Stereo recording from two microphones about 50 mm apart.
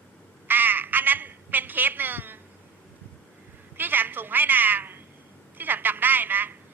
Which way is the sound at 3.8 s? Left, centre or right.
Right.